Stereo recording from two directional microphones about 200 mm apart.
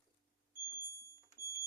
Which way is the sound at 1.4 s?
15° right (ahead or behind).